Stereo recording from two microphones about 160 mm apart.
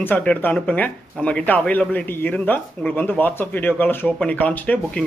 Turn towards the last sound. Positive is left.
turn(degrees=10)  # may be behind; listen again after turning